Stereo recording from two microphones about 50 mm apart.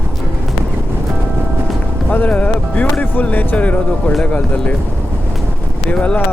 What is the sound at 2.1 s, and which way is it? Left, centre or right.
Speech, left.